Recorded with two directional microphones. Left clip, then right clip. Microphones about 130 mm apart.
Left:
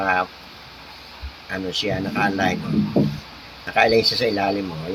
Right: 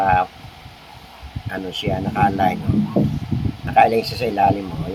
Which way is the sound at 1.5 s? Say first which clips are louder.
Even; 10° left (ahead or behind).